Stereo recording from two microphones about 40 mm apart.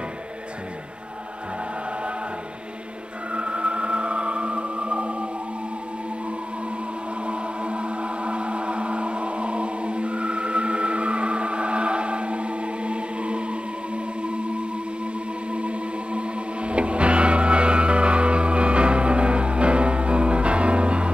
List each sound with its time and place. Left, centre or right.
3.3 s music: right
7.2 s music: right
15.5 s music: right